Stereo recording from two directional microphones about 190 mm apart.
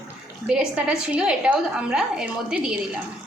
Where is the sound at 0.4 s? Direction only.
5° right (ahead or behind).